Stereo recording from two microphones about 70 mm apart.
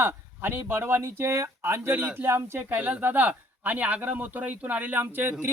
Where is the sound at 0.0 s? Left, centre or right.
Right.